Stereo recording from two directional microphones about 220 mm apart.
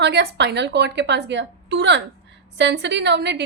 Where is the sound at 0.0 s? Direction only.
50° right (ahead or behind).